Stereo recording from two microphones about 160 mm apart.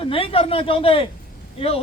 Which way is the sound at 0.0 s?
35° left (ahead or behind).